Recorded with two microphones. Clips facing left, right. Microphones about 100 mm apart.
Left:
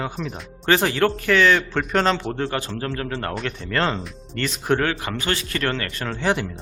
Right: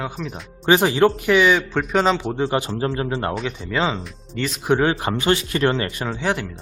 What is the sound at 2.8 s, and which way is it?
Speech, 20° right (ahead or behind).